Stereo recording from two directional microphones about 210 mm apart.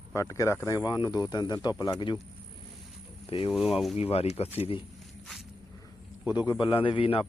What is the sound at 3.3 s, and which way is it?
A man's voice, 25° left (ahead or behind).